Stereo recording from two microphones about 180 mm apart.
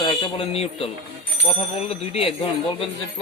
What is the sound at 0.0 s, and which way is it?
Speech, 25° left (ahead or behind).